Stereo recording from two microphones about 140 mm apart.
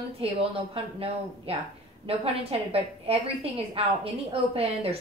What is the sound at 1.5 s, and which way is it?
A woman's voice, 45° right (ahead or behind).